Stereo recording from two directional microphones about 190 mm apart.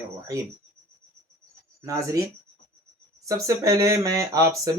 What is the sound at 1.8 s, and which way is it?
Speech, 15° right (ahead or behind).